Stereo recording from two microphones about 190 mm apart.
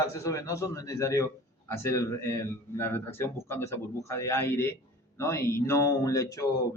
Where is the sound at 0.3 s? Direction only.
15° left (ahead or behind).